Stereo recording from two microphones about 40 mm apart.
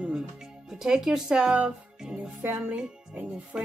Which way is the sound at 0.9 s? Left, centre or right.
Centre.